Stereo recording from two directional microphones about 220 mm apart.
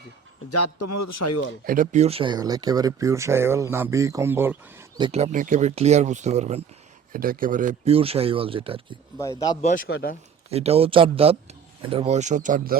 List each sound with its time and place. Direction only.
0.5 s speech: 90° left
1.6 s speech: 40° right (ahead or behind); by 4.9 s 10° right (ahead or behind)
4.9 s speech: 25° right (ahead or behind)
9.6 s speech: 35° left (ahead or behind)
10.5 s speech: 30° right (ahead or behind)